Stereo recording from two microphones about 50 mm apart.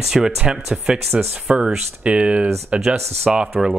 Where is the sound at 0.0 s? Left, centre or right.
Centre.